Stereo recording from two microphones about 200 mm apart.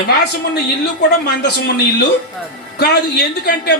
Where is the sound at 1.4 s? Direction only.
55° left (ahead or behind).